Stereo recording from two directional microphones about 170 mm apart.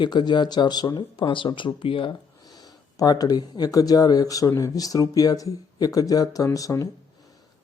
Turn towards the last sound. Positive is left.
turn(degrees=20)  # may be behind; listen again after turning